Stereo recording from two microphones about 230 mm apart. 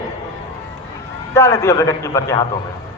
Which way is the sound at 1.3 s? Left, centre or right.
Centre.